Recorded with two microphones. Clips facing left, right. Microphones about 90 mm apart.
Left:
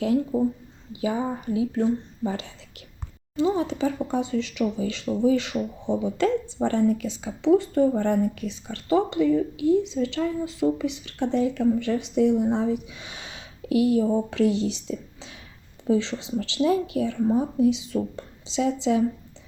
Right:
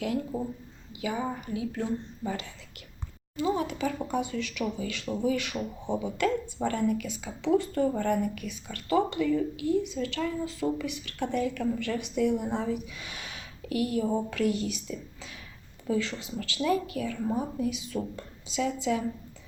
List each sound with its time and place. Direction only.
0.3 s speech: 20° left (ahead or behind)
1.0 s speech: 30° left (ahead or behind)